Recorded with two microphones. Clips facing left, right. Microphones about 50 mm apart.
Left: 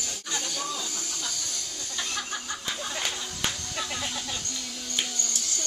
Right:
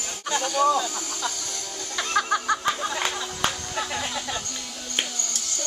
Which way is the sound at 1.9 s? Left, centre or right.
Right.